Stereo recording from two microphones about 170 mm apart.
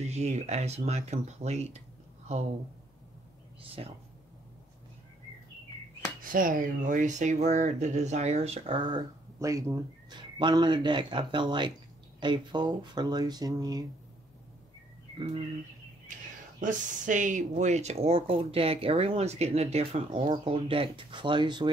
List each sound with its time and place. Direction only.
0.0 s speech: 40° right (ahead or behind)
3.8 s speech: 35° right (ahead or behind)
6.3 s speech: 55° right (ahead or behind); by 13.8 s 20° right (ahead or behind)
15.1 s speech: 30° right (ahead or behind)
16.1 s a sound: 45° right (ahead or behind)
16.5 s speech: 50° right (ahead or behind); by 21.6 s 25° right (ahead or behind)